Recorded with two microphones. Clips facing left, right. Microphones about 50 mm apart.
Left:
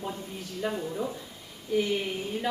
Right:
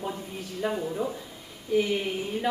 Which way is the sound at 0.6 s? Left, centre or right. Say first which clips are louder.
Right 2 dB; centre.